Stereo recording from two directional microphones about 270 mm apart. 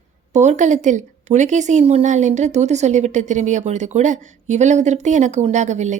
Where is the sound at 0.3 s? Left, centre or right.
Right.